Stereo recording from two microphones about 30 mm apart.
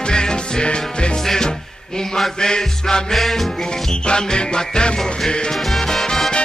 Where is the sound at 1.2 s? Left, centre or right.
Centre.